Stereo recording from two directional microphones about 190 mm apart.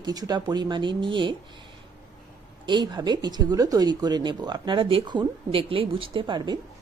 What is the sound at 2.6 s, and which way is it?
Speech, 25° right (ahead or behind).